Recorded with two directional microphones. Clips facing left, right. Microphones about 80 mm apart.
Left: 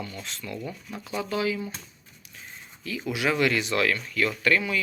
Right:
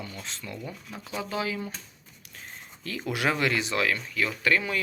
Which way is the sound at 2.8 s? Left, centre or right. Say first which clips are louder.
Left 1 dB; right.